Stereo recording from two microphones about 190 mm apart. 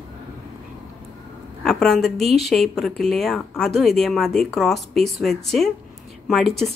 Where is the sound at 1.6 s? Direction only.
Centre (ahead or behind).